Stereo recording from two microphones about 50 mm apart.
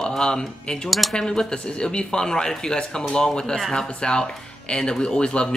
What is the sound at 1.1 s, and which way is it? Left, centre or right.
Speech, centre.